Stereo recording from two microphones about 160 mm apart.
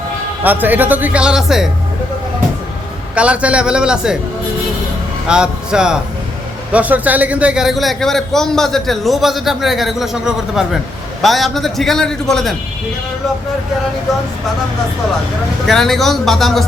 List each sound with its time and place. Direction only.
0.4 s speech: 10° right (ahead or behind)
3.2 s speech: 10° right (ahead or behind)
5.3 s a man's voice: 5° right (ahead or behind)
15.6 s a man's voice: centre (ahead or behind)